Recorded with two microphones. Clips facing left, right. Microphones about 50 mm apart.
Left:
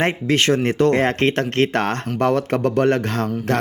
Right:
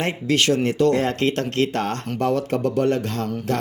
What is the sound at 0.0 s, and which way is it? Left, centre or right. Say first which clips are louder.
Speech: left 3 dB; left.